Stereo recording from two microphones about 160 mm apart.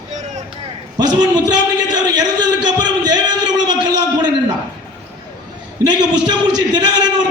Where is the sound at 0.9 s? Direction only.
25° right (ahead or behind).